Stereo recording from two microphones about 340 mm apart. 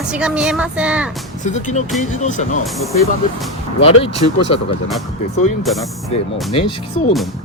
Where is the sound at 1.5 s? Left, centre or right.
Left.